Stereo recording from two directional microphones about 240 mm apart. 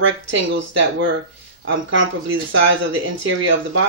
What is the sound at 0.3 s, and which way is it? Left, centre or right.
Speech, right.